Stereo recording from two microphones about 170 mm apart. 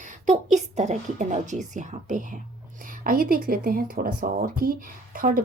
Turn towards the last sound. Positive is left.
turn(degrees=-50)  # may be behind; listen again after turning